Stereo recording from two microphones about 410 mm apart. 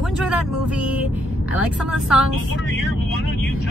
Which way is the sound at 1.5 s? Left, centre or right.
Centre.